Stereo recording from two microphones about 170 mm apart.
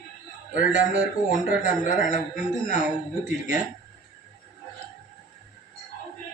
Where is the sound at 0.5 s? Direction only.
55° left (ahead or behind).